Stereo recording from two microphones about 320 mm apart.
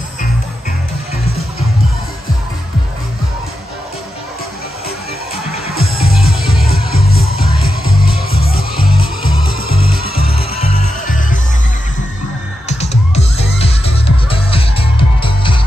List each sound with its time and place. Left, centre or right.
5.8 s music: left
12.6 s music: centre